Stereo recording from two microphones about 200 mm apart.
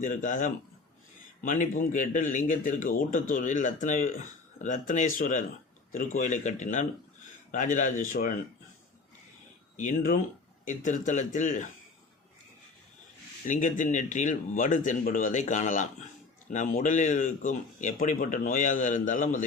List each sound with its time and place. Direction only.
0.0 s speech: 40° left (ahead or behind)
9.7 s speech: 40° left (ahead or behind)
13.5 s speech: 40° left (ahead or behind)